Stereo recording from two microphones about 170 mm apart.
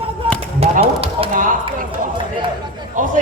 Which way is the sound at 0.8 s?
35° right (ahead or behind).